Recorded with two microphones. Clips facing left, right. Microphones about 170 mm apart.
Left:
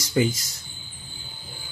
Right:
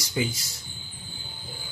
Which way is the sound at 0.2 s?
50° left (ahead or behind).